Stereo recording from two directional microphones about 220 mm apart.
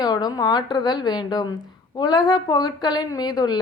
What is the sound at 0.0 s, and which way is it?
A woman's voice, 20° left (ahead or behind).